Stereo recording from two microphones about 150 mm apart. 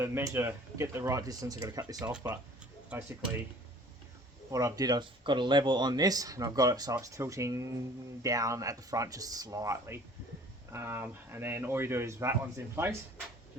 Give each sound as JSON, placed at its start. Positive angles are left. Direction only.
{"t": 0.0, "sound": "speech", "side_deg": -15}
{"t": 2.0, "sound": "speech", "side_deg": -10}
{"t": 4.5, "sound": "speech", "side_deg": -25}